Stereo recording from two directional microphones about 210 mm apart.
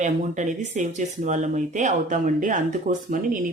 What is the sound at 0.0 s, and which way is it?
Speech, 35° right (ahead or behind).